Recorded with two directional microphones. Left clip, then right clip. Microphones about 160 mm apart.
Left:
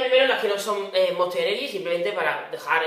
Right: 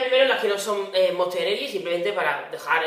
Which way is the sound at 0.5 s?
40° right (ahead or behind).